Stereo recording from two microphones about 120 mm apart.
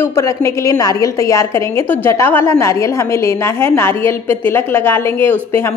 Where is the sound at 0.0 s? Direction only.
20° left (ahead or behind).